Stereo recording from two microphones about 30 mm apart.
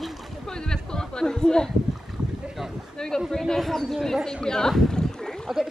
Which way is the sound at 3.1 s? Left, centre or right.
Centre.